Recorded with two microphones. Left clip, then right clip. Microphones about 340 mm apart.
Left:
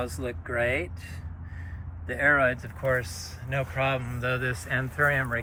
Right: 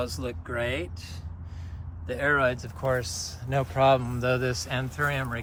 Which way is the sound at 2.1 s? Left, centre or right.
Centre.